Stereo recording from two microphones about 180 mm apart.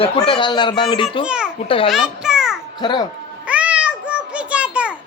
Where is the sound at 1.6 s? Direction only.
30° left (ahead or behind).